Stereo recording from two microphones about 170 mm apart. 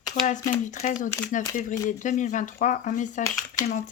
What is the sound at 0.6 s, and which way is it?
Speech, 45° left (ahead or behind).